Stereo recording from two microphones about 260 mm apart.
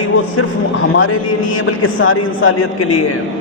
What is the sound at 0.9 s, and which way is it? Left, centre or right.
A man's voice, left.